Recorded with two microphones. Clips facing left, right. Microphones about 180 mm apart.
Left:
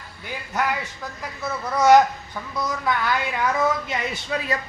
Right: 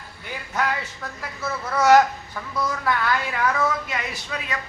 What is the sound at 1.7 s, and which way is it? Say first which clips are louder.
Speech: left 1 dB; 15° left (ahead or behind).